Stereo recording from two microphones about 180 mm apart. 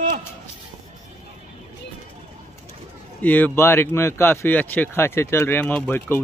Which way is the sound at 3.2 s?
10° left (ahead or behind).